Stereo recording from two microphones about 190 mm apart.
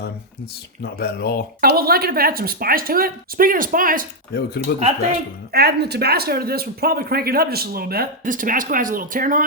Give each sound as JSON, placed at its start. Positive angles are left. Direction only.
{"t": 0.8, "sound": "speech", "side_deg": 55}
{"t": 1.6, "sound": "speech", "side_deg": -50}
{"t": 4.7, "sound": "speech", "side_deg": 55}
{"t": 5.5, "sound": "speech", "side_deg": -60}